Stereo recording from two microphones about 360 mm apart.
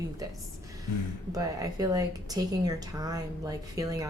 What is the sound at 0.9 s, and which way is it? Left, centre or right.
Speech, left.